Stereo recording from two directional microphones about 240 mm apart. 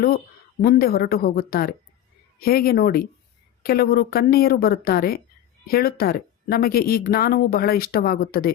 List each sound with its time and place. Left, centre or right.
0.6 s a woman's voice: left